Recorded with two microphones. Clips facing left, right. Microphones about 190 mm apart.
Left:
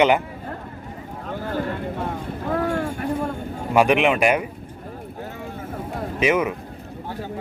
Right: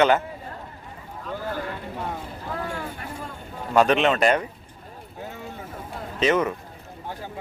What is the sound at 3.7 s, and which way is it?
Speech, 10° left (ahead or behind).